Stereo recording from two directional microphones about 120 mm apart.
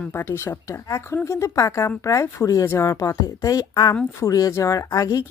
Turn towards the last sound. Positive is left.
turn(degrees=30)  # may be behind; listen again after turning